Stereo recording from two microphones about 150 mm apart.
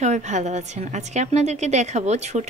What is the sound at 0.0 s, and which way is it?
A woman's voice, 50° right (ahead or behind).